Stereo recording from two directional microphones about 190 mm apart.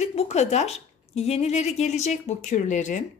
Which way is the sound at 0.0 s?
35° left (ahead or behind).